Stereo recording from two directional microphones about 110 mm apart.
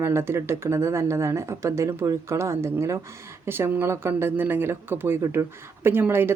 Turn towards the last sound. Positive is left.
turn(degrees=-20)  # may be behind; listen again after turning